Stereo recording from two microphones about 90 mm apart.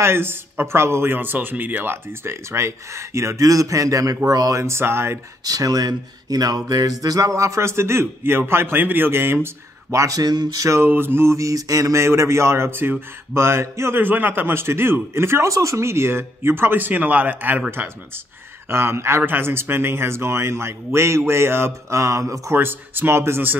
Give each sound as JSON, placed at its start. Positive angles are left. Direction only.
{"t": 0.0, "sound": "a man's voice", "side_deg": -25}
{"t": 5.4, "sound": "speech", "side_deg": -45}
{"t": 10.8, "sound": "a man's voice", "side_deg": -25}
{"t": 22.5, "sound": "a man's voice", "side_deg": -25}